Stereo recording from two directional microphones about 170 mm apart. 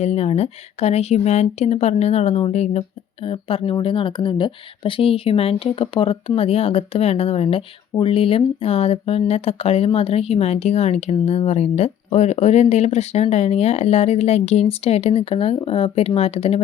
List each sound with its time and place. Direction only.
0.0 s speech: 35° left (ahead or behind)